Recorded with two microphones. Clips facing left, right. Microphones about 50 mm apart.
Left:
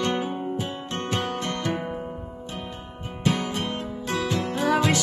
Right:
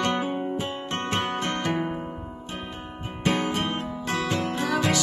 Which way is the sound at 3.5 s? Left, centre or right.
Right.